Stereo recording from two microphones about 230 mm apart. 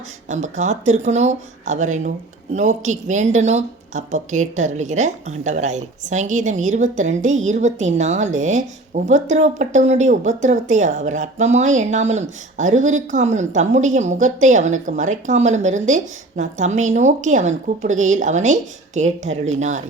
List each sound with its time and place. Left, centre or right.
0.3 s a woman's voice: right